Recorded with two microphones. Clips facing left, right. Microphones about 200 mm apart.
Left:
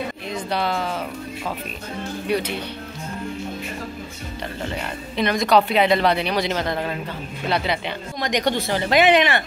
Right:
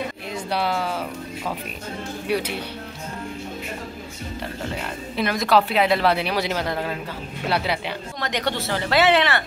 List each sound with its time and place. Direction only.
0.3 s speech: 10° right (ahead or behind)
2.2 s speech: 10° right (ahead or behind)
4.8 s speech: 5° right (ahead or behind)
8.2 s speech: 15° left (ahead or behind)